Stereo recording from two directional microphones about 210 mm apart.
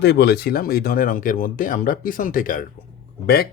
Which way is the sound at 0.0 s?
50° left (ahead or behind).